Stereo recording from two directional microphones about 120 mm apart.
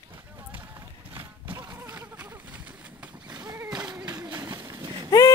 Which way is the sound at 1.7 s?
25° right (ahead or behind).